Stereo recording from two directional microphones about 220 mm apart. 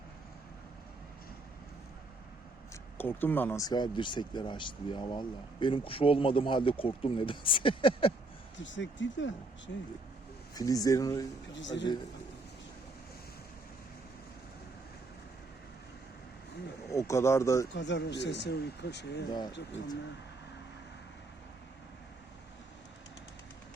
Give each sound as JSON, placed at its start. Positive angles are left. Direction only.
{"t": 3.0, "sound": "speech", "side_deg": 10}
{"t": 8.5, "sound": "speech", "side_deg": 55}
{"t": 10.5, "sound": "speech", "side_deg": 15}
{"t": 11.5, "sound": "speech", "side_deg": 55}
{"t": 16.9, "sound": "speech", "side_deg": 15}
{"t": 17.7, "sound": "speech", "side_deg": 50}
{"t": 19.3, "sound": "speech", "side_deg": 20}